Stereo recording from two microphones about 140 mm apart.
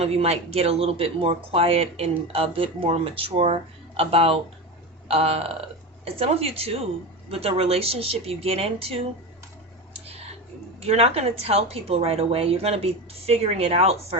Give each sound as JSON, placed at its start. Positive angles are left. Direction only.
{"t": 0.0, "sound": "speech", "side_deg": -45}
{"t": 10.8, "sound": "speech", "side_deg": -45}